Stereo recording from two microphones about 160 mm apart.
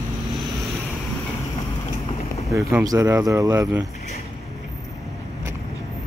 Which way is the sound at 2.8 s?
20° right (ahead or behind).